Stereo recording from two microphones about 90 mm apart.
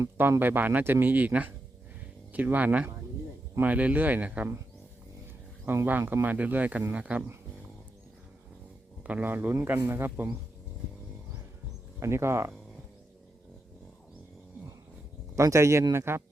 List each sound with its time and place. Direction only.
0.0 s speech: 25° right (ahead or behind)
5.6 s speech: 25° right (ahead or behind)
9.0 s speech: 20° right (ahead or behind)
11.9 s speech: 30° right (ahead or behind)
15.4 s speech: 35° right (ahead or behind)